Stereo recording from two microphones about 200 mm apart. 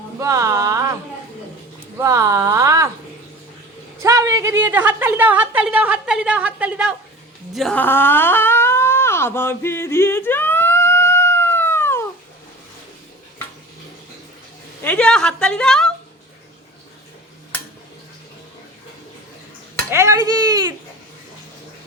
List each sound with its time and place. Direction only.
0.2 s speech: 15° right (ahead or behind)
2.0 s a sound: 15° right (ahead or behind)
4.0 s a woman's voice: 15° right (ahead or behind)
7.5 s a sound: 5° left (ahead or behind)
14.8 s a woman's voice: 5° left (ahead or behind)
19.9 s speech: 15° right (ahead or behind)